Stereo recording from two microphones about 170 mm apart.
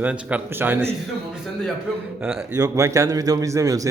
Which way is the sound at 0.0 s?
10° right (ahead or behind).